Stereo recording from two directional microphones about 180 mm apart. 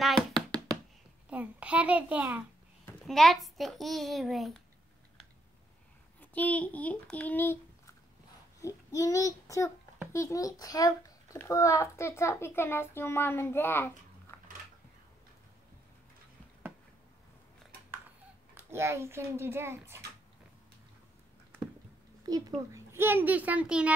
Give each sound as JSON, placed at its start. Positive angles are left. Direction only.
{"t": 0.3, "sound": "hands", "side_deg": -25}
{"t": 1.3, "sound": "a child's voice", "side_deg": -10}
{"t": 6.3, "sound": "a child's voice", "side_deg": 10}
{"t": 8.5, "sound": "child singing", "side_deg": 15}
{"t": 10.1, "sound": "a child's voice", "side_deg": 20}
{"t": 14.3, "sound": "a sound", "side_deg": 15}
{"t": 18.5, "sound": "speech", "side_deg": -10}
{"t": 22.9, "sound": "speech", "side_deg": -10}